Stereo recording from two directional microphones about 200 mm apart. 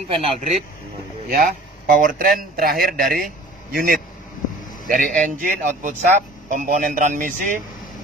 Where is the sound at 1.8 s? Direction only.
40° right (ahead or behind).